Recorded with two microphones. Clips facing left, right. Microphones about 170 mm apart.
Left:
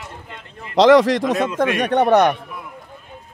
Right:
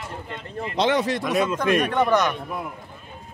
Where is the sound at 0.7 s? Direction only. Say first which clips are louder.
Left 10 dB; 90° left.